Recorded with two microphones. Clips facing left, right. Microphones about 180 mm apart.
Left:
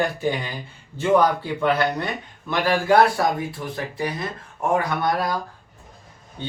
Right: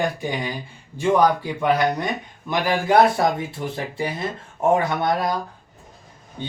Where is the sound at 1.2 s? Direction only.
15° right (ahead or behind).